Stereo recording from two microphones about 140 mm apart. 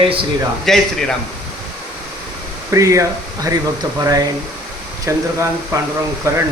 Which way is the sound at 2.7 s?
20° right (ahead or behind).